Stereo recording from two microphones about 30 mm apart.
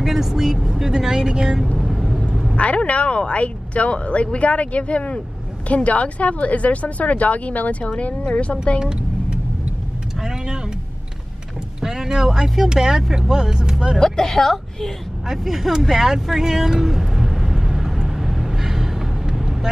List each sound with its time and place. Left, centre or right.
0.0 s speech: centre
1.8 s vehicle: centre
2.5 s speech: left
8.2 s speech: left
10.3 s speech: right
11.8 s speech: centre
13.9 s a woman's voice: left
15.2 s speech: centre
16.8 s vehicle: centre